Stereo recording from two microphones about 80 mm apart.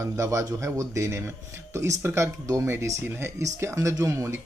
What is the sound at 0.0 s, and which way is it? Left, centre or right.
A man's voice, right.